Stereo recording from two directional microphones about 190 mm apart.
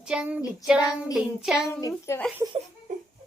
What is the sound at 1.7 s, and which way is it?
Speech, 15° left (ahead or behind).